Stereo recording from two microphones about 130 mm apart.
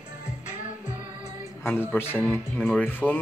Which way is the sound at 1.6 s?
15° left (ahead or behind).